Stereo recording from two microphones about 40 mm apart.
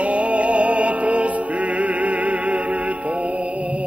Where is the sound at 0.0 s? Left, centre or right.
Right.